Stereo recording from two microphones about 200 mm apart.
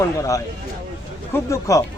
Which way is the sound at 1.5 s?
15° left (ahead or behind).